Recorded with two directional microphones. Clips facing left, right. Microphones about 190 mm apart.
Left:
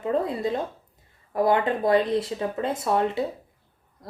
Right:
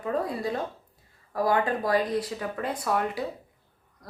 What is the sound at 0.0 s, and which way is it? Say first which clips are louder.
A woman's voice: left 4 dB; 25° left (ahead or behind).